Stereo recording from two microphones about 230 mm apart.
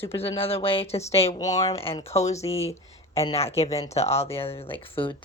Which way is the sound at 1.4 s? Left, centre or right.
Centre.